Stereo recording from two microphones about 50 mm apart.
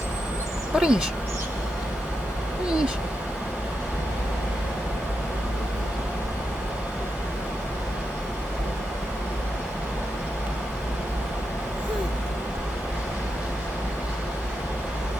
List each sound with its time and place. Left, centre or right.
0.8 s speech: centre